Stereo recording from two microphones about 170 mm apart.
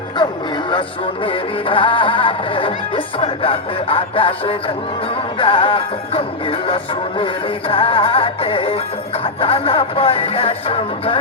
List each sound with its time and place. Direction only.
0.7 s music: 30° left (ahead or behind)